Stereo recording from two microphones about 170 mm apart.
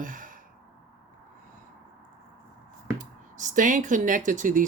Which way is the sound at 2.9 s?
45° right (ahead or behind).